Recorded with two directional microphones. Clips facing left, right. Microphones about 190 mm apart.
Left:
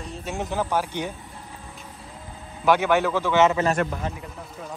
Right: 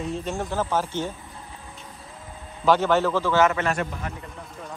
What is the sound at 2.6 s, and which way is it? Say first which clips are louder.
Speech: even; 10° left (ahead or behind).